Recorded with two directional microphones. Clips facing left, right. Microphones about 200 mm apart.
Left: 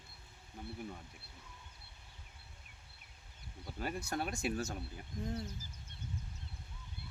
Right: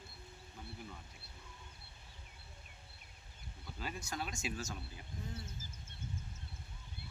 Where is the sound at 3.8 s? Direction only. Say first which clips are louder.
Left 5 dB; 55° left (ahead or behind).